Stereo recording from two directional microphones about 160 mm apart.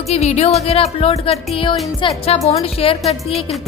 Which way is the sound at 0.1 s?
40° left (ahead or behind).